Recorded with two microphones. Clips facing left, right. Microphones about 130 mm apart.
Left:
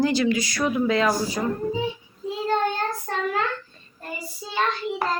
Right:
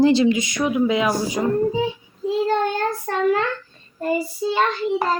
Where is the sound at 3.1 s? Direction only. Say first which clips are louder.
Right 5 dB; 65° right (ahead or behind).